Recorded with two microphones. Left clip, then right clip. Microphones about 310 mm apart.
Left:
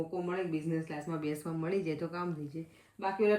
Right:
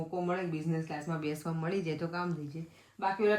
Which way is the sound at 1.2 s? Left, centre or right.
Centre.